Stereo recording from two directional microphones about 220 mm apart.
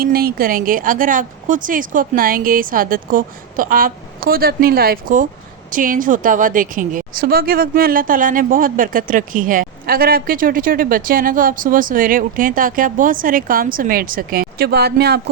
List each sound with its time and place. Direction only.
0.0 s a woman's voice: 45° right (ahead or behind)